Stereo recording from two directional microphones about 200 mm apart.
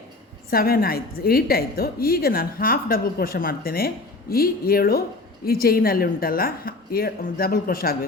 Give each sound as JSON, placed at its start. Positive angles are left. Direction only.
{"t": 0.5, "sound": "a woman's voice", "side_deg": 50}